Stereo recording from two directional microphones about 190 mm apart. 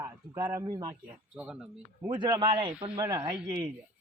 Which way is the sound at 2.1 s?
25° right (ahead or behind).